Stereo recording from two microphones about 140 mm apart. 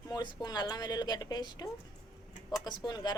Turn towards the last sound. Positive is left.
turn(degrees=30)  # may be behind; listen again after turning